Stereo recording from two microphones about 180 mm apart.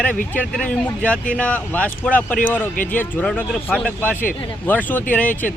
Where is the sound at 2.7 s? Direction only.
50° left (ahead or behind).